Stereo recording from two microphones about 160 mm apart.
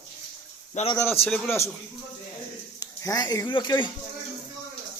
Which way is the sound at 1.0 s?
15° left (ahead or behind).